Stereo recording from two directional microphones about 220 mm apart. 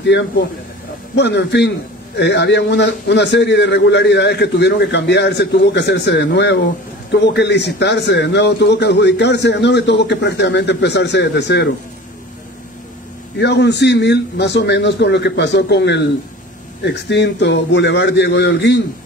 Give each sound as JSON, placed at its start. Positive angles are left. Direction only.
{"t": 0.0, "sound": "a man's voice", "side_deg": 50}
{"t": 13.4, "sound": "a man's voice", "side_deg": 50}